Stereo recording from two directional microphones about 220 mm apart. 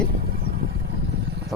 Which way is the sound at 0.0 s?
45° right (ahead or behind).